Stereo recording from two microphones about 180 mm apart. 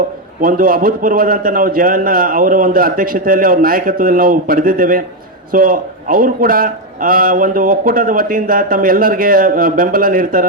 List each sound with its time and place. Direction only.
0.4 s a man's voice: 50° right (ahead or behind)